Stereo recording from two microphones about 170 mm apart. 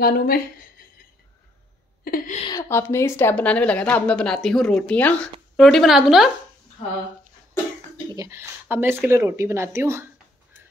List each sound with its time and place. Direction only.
0.0 s a woman's voice: 60° left (ahead or behind)
2.0 s a woman's voice: 55° left (ahead or behind)
2.4 s a woman's voice: 15° left (ahead or behind); by 6.3 s centre (ahead or behind)
8.1 s speech: 20° right (ahead or behind)